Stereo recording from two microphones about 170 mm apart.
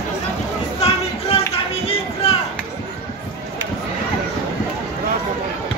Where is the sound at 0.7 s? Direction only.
35° left (ahead or behind).